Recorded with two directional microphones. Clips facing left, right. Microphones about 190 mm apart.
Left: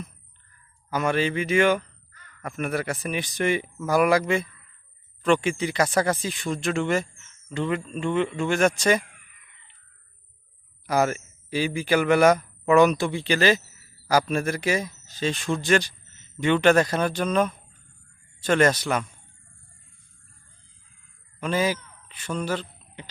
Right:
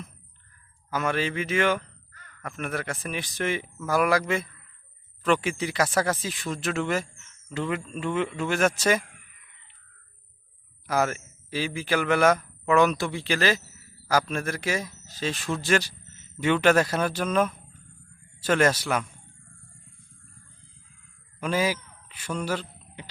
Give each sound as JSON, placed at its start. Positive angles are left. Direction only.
{"t": 0.9, "sound": "speech", "side_deg": 0}
{"t": 3.8, "sound": "a man's voice", "side_deg": 15}
{"t": 4.1, "sound": "speech", "side_deg": 0}
{"t": 11.0, "sound": "speech", "side_deg": 10}
{"t": 13.0, "sound": "speech", "side_deg": 0}
{"t": 14.1, "sound": "a man's voice", "side_deg": 10}
{"t": 14.4, "sound": "speech", "side_deg": 0}
{"t": 21.4, "sound": "a man's voice", "side_deg": -10}